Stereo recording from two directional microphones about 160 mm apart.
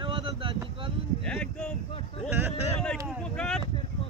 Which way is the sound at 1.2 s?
5° left (ahead or behind).